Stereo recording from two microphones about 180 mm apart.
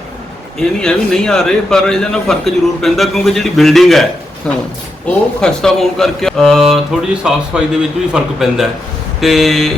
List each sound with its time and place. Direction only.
0.6 s speech: 5° left (ahead or behind)